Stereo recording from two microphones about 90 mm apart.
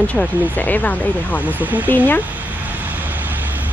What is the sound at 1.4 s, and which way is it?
Speech, 20° right (ahead or behind).